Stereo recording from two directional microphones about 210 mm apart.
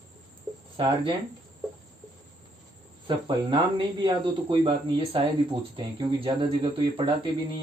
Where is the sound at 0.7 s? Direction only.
25° right (ahead or behind).